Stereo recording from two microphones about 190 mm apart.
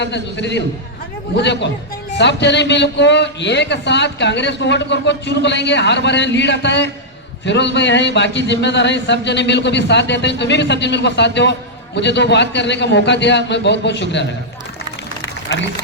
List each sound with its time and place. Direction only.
0.0 s a man's voice: 65° left (ahead or behind)